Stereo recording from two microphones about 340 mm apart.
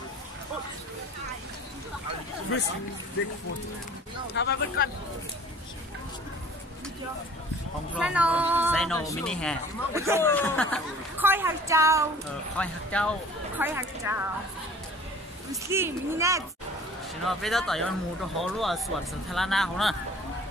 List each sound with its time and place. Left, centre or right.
4.3 s speech: left
7.9 s speech: centre
9.9 s speech: centre
10.2 s speech: centre
12.5 s speech: centre
15.5 s speech: centre